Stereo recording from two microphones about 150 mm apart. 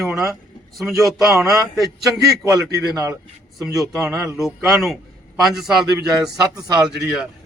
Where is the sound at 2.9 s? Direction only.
20° right (ahead or behind).